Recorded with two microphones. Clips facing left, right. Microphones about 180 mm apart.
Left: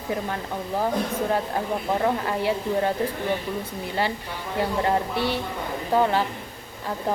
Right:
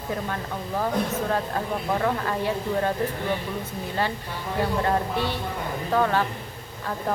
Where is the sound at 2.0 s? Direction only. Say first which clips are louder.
Left 2 dB; 20° left (ahead or behind).